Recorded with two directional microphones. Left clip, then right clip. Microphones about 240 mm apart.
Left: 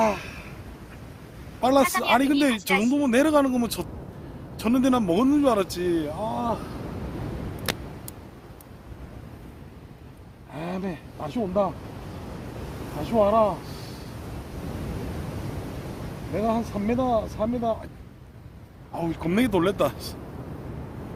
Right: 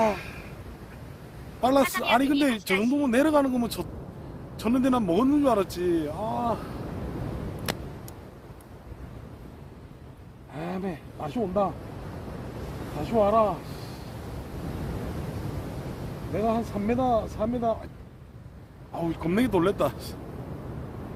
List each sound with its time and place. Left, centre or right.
0.0 s speech: left
1.8 s speech: centre
2.1 s speech: left
7.7 s vehicle: centre
10.5 s speech: centre
13.0 s speech: centre
16.3 s speech: left
18.9 s speech: centre